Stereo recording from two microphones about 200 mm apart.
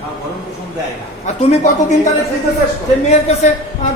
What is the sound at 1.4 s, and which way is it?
Speech, 35° left (ahead or behind).